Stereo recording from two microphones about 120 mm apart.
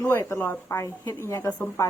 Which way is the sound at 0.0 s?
20° left (ahead or behind).